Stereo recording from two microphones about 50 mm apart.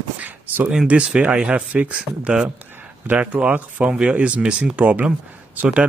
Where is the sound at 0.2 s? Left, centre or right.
Right.